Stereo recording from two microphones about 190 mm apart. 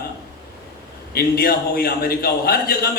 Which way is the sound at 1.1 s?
50° left (ahead or behind).